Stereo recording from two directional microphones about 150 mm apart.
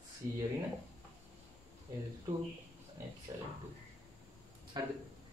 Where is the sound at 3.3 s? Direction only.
25° right (ahead or behind).